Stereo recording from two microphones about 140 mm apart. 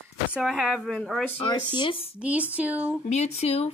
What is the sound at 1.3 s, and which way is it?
Speech, 35° left (ahead or behind).